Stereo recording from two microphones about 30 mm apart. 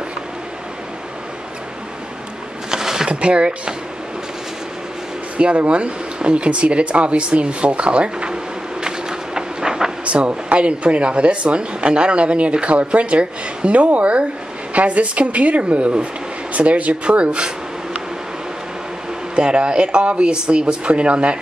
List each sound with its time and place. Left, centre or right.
2.7 s a sound: centre
3.1 s speech: right
5.7 s speech: right
8.8 s vehicle: right
10.0 s speech: right
13.7 s a woman's voice: right
19.3 s speech: right